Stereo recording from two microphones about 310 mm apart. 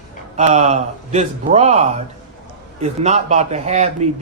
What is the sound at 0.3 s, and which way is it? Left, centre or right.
A man's voice, right.